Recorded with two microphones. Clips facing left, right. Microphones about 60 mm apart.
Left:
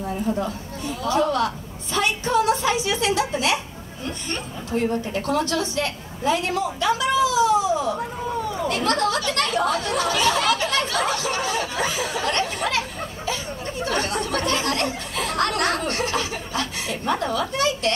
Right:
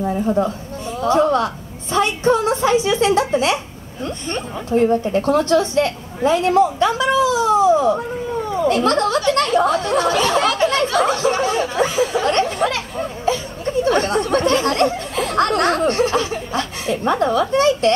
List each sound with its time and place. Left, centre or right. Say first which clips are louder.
0.0 s a woman's voice: right 7 dB; right
8.6 s chatter: right 6 dB; right